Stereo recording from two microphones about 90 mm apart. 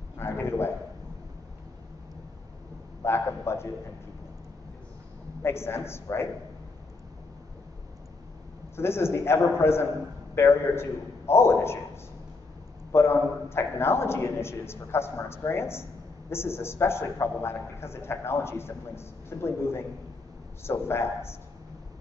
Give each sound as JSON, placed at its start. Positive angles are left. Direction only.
{"t": 0.2, "sound": "a man's voice", "side_deg": 30}
{"t": 3.0, "sound": "a man's voice", "side_deg": 25}
{"t": 5.4, "sound": "a man's voice", "side_deg": 30}
{"t": 8.7, "sound": "a man's voice", "side_deg": 30}